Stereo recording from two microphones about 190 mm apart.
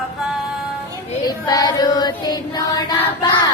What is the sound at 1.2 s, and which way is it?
Child singing, 20° left (ahead or behind).